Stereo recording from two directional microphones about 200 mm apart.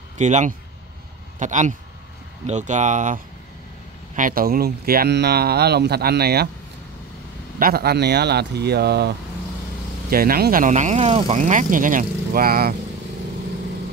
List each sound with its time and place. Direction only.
0.2 s speech: 35° right (ahead or behind)
7.5 s speech: 50° right (ahead or behind)